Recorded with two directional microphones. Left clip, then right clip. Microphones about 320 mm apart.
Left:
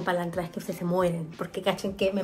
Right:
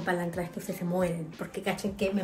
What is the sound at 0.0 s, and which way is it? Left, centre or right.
A woman's voice, centre.